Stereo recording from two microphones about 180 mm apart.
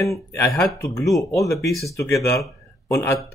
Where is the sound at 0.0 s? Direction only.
15° left (ahead or behind).